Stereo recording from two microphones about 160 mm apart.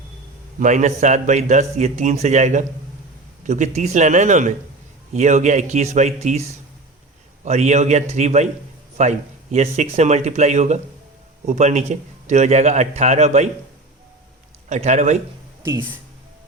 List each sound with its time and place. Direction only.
0.6 s a man's voice: 50° right (ahead or behind)
7.4 s a man's voice: 45° right (ahead or behind)
14.7 s a man's voice: 50° right (ahead or behind)
15.6 s speech: 15° right (ahead or behind)